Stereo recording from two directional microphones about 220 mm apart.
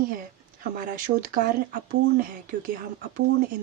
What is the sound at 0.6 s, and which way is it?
Speech, 40° right (ahead or behind).